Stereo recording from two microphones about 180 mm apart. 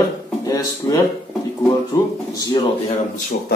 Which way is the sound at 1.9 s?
15° left (ahead or behind).